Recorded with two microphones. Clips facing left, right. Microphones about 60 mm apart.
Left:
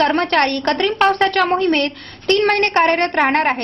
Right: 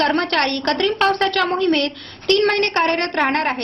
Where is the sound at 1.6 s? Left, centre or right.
Left.